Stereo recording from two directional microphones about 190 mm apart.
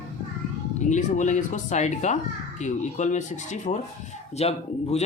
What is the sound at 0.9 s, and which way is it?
Speech, 40° left (ahead or behind).